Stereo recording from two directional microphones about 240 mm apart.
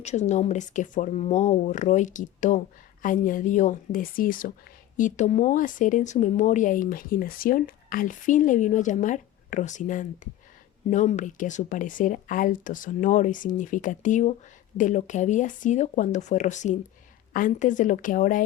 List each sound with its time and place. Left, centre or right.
0.0 s speech: left